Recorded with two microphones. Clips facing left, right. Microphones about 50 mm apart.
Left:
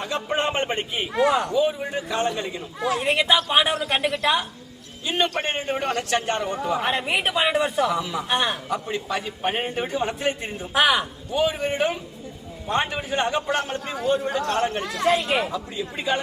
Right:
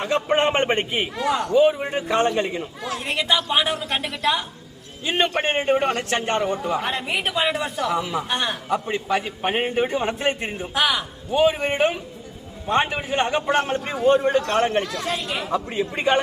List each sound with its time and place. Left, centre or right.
0.0 s a man's voice: right
1.1 s speech: centre
1.5 s a man's voice: right
2.8 s speech: centre
5.0 s a man's voice: right
6.4 s a man's voice: centre
6.7 s speech: centre
7.9 s a man's voice: right
8.3 s speech: centre
8.7 s a man's voice: right
10.8 s speech: centre
11.3 s a man's voice: right
14.8 s speech: left
15.7 s speech: right